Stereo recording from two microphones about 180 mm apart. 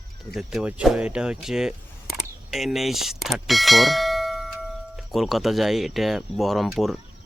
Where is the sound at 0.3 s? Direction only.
5° right (ahead or behind).